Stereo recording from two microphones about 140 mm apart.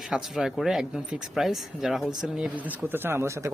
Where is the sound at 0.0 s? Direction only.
5° right (ahead or behind).